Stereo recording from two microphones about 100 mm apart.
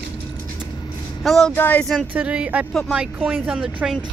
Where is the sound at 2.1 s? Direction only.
10° right (ahead or behind).